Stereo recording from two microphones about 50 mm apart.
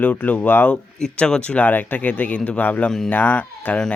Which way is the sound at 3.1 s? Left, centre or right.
Left.